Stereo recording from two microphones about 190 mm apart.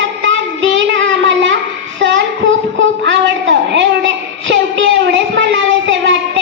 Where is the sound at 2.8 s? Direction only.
75° right (ahead or behind).